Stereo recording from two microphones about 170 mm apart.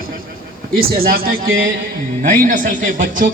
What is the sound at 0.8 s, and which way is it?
A man's voice, 60° right (ahead or behind).